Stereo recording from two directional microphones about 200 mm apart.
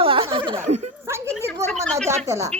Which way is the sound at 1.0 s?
15° right (ahead or behind).